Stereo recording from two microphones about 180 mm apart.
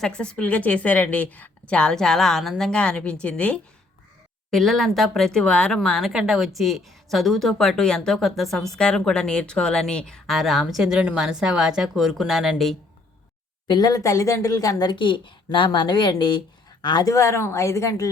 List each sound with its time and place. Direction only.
0.0 s a woman's voice: 5° left (ahead or behind)
13.7 s a woman's voice: 20° left (ahead or behind)